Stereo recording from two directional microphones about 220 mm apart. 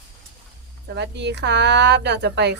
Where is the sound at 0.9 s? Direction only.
50° right (ahead or behind).